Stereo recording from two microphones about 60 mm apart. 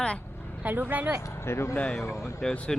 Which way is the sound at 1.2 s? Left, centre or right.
Left.